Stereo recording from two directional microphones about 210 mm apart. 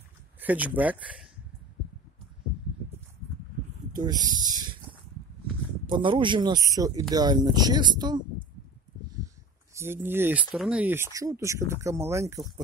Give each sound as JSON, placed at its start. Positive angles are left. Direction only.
{"t": 0.4, "sound": "a sound", "side_deg": -5}
{"t": 0.7, "sound": "speech", "side_deg": -5}
{"t": 3.9, "sound": "speech", "side_deg": -20}
{"t": 5.9, "sound": "speech", "side_deg": -25}
{"t": 9.8, "sound": "speech", "side_deg": -10}